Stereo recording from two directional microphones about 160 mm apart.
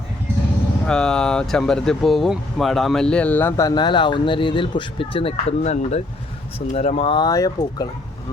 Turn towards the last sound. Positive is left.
turn(degrees=25)  # may be behind; listen again after turning